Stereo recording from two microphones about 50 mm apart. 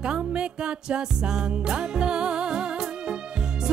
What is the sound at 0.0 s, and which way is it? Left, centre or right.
Music, centre.